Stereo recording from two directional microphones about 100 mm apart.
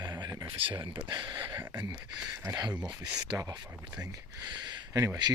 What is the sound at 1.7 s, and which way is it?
Speech, 15° right (ahead or behind).